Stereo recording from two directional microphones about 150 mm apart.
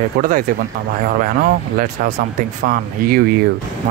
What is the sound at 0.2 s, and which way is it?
Speech, 70° right (ahead or behind).